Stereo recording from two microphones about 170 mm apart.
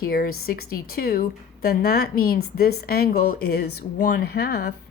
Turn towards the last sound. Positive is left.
turn(degrees=75)  # may be behind; listen again after turning